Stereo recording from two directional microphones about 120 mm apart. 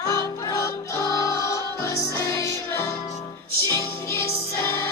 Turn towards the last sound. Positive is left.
turn(degrees=20)  # may be behind; listen again after turning